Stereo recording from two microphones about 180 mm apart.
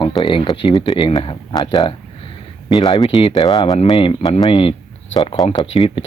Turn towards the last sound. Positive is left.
turn(degrees=35)  # may be behind; listen again after turning